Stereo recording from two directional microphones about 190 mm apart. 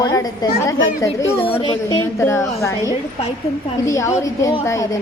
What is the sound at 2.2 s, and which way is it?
Speech, 15° left (ahead or behind).